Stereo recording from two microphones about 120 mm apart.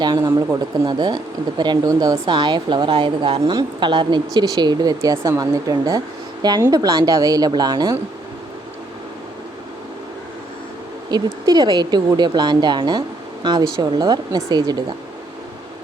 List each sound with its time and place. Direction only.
0.0 s speech: 35° right (ahead or behind)
11.1 s speech: 35° right (ahead or behind)